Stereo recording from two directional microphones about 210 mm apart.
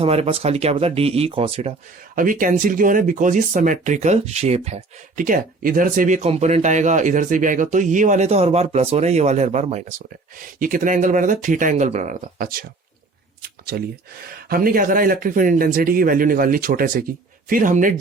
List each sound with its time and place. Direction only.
0.0 s speech: 30° right (ahead or behind)
2.1 s speech: 40° right (ahead or behind)
13.4 s a sound: 45° right (ahead or behind)
14.5 s speech: 45° right (ahead or behind)